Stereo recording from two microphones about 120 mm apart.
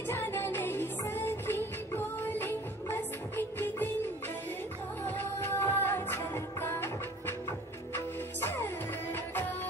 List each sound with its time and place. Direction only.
0.1 s music: 20° left (ahead or behind)
5.0 s music: 15° left (ahead or behind)
8.4 s music: 20° left (ahead or behind)